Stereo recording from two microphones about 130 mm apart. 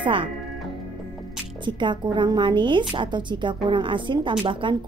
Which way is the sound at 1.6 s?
35° right (ahead or behind).